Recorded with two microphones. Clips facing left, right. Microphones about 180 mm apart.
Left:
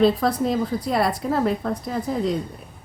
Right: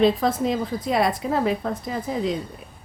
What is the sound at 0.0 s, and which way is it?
A woman's voice, centre (ahead or behind).